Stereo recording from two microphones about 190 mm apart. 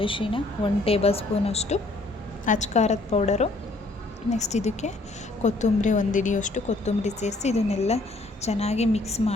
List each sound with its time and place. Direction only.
0.0 s a woman's voice: 25° left (ahead or behind)